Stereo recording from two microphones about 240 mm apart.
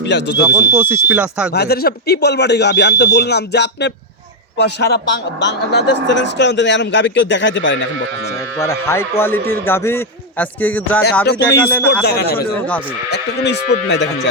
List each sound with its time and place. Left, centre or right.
0.1 s a man's voice: left
0.4 s speech: centre
1.5 s a man's voice: left
8.5 s speech: centre
12.0 s a man's voice: left